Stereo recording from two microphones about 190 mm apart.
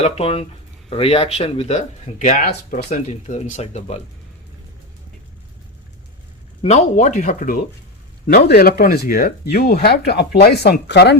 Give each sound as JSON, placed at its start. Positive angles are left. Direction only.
{"t": 0.0, "sound": "speech", "side_deg": 30}
{"t": 6.6, "sound": "speech", "side_deg": 35}